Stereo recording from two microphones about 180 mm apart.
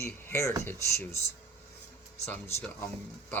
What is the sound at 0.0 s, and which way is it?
Speech, 15° left (ahead or behind).